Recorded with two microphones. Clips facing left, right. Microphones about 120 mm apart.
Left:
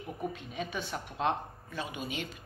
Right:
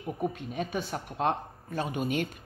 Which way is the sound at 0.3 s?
45° right (ahead or behind).